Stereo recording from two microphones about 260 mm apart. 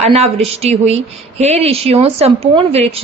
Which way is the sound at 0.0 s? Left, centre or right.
Right.